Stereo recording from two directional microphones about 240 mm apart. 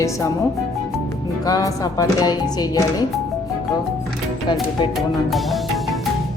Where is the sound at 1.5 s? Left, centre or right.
Centre.